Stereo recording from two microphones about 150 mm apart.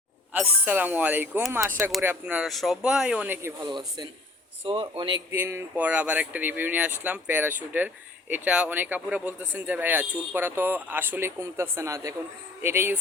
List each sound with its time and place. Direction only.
0.3 s speech: 10° right (ahead or behind)
3.4 s speech: 25° right (ahead or behind)
5.3 s speech: 15° right (ahead or behind)